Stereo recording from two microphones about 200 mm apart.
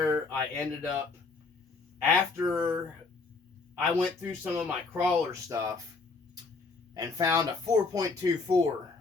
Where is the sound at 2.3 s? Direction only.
10° right (ahead or behind).